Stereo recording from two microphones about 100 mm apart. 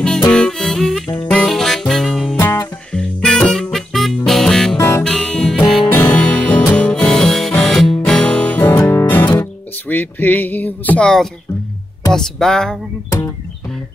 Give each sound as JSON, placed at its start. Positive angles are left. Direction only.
{"t": 0.3, "sound": "music", "side_deg": 5}
{"t": 2.3, "sound": "music", "side_deg": 30}
{"t": 2.9, "sound": "music", "side_deg": 10}
{"t": 4.7, "sound": "music", "side_deg": 25}
{"t": 5.0, "sound": "music", "side_deg": 5}
{"t": 12.1, "sound": "speech", "side_deg": 5}